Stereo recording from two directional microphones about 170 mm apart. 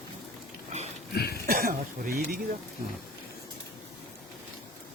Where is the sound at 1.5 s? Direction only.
55° right (ahead or behind).